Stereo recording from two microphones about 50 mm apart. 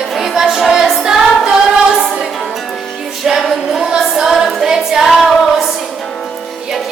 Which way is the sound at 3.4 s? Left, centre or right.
Centre.